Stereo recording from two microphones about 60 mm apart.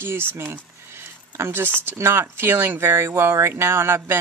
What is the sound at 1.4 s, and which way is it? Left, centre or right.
Speech, right.